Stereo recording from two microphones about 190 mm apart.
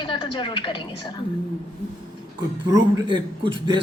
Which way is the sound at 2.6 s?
20° right (ahead or behind).